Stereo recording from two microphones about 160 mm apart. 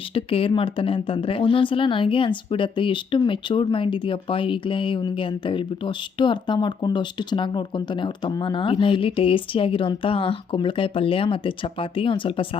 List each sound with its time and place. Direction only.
0.1 s speech: 35° left (ahead or behind)